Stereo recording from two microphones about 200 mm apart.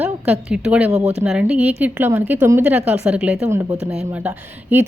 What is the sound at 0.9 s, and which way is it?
Speech, 30° right (ahead or behind).